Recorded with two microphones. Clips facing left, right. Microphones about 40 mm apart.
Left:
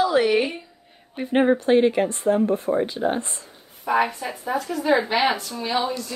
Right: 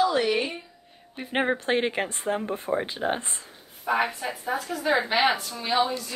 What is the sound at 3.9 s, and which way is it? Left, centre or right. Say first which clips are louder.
Speech: left 4 dB; centre.